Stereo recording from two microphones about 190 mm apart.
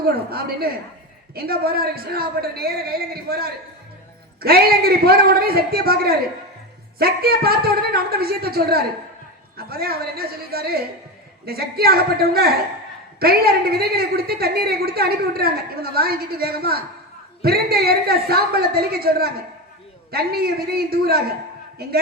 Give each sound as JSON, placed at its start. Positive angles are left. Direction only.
{"t": 0.0, "sound": "a woman's voice", "side_deg": -55}